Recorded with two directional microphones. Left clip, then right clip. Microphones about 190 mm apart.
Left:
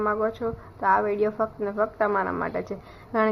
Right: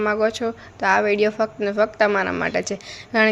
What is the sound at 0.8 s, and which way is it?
A woman's voice, 30° right (ahead or behind).